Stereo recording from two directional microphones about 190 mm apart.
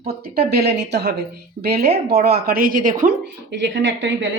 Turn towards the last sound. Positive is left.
turn(degrees=-70)  # may be behind; listen again after turning